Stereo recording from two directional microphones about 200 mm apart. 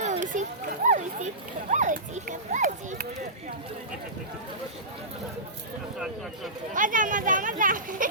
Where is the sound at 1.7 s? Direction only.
40° right (ahead or behind).